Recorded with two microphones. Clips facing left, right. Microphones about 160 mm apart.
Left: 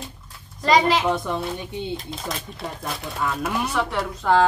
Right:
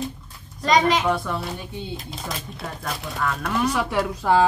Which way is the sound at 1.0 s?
20° left (ahead or behind).